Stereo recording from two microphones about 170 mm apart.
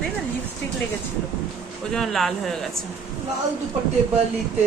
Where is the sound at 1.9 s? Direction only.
Centre (ahead or behind).